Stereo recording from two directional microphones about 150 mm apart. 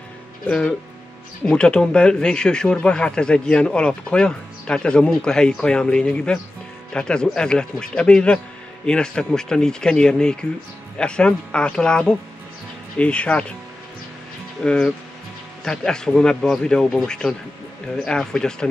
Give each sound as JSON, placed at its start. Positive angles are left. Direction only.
{"t": 0.5, "sound": "speech", "side_deg": 5}
{"t": 14.6, "sound": "speech", "side_deg": 5}